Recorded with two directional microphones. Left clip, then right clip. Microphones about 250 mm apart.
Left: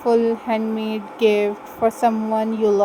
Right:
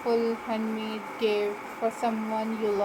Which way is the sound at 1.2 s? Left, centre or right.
Left.